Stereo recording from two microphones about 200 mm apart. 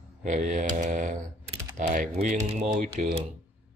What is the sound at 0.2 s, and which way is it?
Speech, 40° right (ahead or behind).